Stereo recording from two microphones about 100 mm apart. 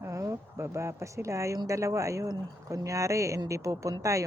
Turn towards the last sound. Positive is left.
turn(degrees=-35)  # may be behind; listen again after turning